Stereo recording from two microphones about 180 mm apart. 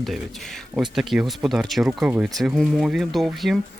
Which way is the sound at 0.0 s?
Centre (ahead or behind).